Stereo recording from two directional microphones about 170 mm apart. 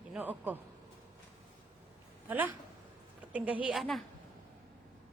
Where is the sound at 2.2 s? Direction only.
10° right (ahead or behind).